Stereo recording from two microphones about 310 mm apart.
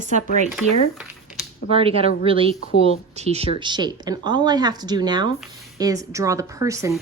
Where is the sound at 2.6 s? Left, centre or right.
Left.